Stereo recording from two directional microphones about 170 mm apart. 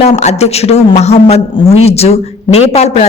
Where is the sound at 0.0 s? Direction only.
40° left (ahead or behind).